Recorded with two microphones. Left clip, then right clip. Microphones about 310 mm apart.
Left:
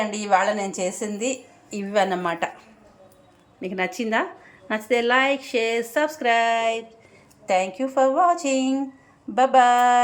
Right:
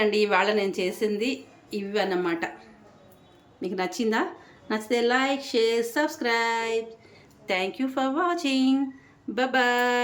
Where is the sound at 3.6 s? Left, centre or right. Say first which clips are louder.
Left 2 dB; centre.